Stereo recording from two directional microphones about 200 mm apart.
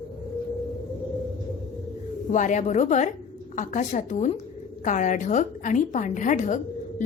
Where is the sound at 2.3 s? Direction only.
40° left (ahead or behind).